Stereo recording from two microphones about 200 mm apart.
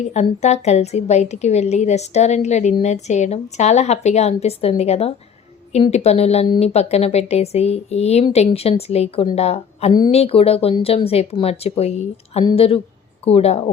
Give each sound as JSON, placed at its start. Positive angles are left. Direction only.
{"t": 0.0, "sound": "a woman's voice", "side_deg": 35}